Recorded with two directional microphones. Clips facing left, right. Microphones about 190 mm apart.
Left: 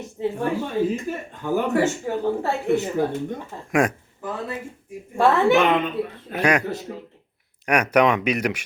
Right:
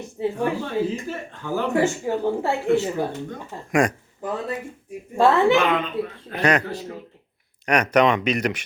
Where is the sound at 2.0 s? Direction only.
15° right (ahead or behind).